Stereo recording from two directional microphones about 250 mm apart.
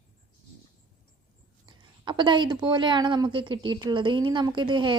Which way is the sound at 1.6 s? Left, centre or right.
Centre.